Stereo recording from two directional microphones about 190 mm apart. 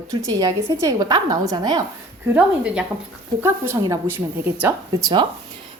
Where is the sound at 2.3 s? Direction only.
5° right (ahead or behind).